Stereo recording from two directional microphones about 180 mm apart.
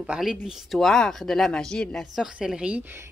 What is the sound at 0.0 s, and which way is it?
Speech, 5° right (ahead or behind).